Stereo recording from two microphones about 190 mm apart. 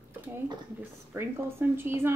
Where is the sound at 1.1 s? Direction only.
10° right (ahead or behind).